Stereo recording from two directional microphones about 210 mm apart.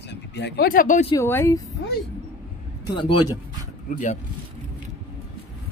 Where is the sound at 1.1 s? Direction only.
10° left (ahead or behind).